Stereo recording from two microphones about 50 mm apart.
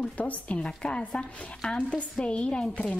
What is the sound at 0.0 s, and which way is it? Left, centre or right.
Speech, left.